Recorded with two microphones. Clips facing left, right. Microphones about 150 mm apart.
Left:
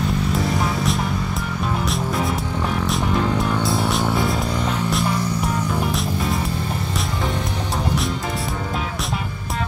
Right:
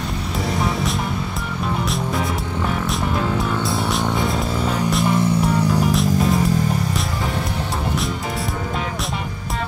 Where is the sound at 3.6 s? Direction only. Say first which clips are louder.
Left 1 dB; centre (ahead or behind).